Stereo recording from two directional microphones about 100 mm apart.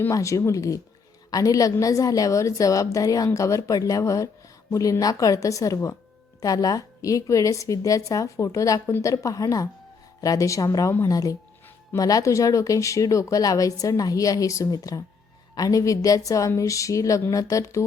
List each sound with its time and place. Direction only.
0.1 s speech: 30° left (ahead or behind)